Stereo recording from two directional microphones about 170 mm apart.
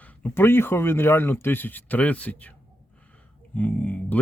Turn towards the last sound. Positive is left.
turn(degrees=10)  # may be behind; listen again after turning